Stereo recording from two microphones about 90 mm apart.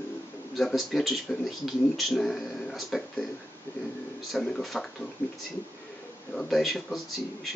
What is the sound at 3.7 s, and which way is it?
Speech, 20° left (ahead or behind).